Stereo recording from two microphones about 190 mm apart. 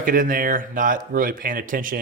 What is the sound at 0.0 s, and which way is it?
Speech, 45° right (ahead or behind).